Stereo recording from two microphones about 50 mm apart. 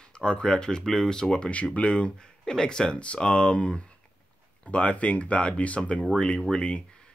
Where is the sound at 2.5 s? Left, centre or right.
Centre.